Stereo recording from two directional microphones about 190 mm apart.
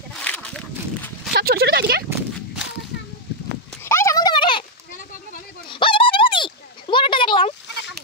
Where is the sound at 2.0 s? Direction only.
5° right (ahead or behind).